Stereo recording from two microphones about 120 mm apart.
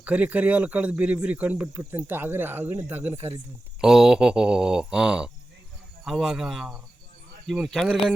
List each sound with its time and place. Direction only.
0.0 s speech: 10° right (ahead or behind)
3.8 s speech: 5° right (ahead or behind)